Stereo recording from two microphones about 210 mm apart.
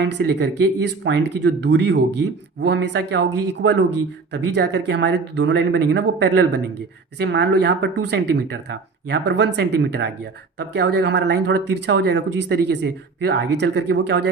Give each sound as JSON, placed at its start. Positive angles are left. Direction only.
{"t": 0.0, "sound": "speech", "side_deg": -50}